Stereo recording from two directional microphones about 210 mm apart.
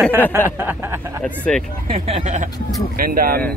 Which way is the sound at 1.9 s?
30° right (ahead or behind).